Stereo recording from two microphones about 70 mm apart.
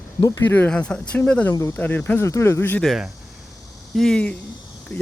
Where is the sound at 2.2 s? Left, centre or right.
Left.